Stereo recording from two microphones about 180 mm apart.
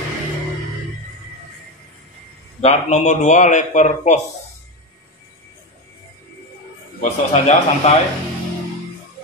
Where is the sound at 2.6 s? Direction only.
40° left (ahead or behind).